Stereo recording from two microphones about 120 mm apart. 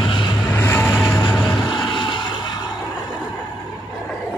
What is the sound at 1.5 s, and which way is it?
Vehicle, 40° left (ahead or behind).